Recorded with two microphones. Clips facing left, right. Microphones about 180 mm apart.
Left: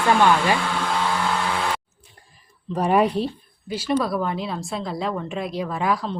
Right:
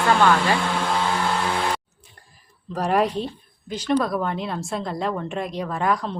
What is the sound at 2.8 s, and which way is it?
A woman's voice, centre (ahead or behind).